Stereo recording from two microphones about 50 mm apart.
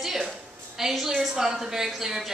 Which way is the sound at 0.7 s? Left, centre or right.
Centre.